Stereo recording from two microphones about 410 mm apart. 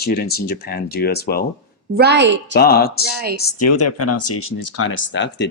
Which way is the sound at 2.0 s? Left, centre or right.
Right.